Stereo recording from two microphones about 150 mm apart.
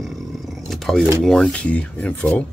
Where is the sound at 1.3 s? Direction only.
5° left (ahead or behind).